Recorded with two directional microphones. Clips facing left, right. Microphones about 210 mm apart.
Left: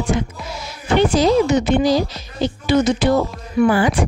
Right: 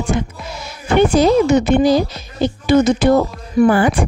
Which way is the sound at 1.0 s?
55° right (ahead or behind).